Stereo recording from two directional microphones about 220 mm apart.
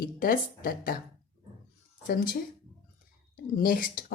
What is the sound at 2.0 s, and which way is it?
Speech, 45° left (ahead or behind).